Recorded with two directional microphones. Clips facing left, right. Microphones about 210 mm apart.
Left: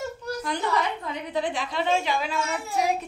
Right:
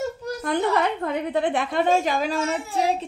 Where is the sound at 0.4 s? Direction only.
55° right (ahead or behind).